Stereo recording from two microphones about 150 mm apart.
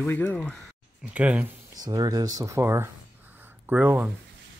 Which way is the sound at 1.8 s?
25° right (ahead or behind).